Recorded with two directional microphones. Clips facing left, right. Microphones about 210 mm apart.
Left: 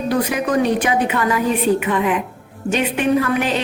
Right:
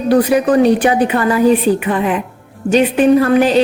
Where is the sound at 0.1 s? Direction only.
35° right (ahead or behind).